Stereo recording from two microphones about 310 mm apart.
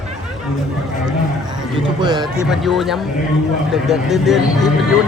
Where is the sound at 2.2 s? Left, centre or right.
Centre.